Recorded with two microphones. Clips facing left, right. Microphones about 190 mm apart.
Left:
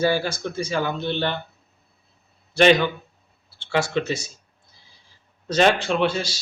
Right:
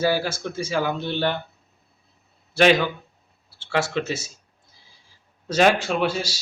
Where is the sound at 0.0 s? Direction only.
5° right (ahead or behind).